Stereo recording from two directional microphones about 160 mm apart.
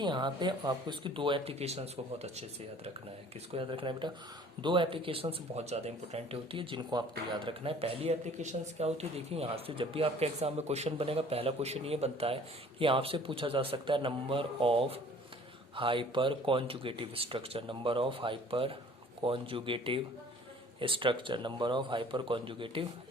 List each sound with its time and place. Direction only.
0.0 s speech: 30° right (ahead or behind)
3.5 s speech: 35° right (ahead or behind)